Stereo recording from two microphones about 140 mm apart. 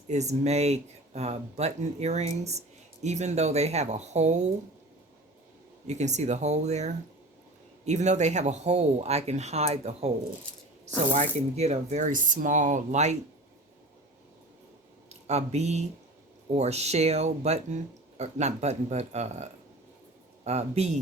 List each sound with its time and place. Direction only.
0.1 s speech: 55° right (ahead or behind)
5.9 s speech: 55° right (ahead or behind)
11.1 s speech: 55° right (ahead or behind)
15.3 s speech: 50° right (ahead or behind)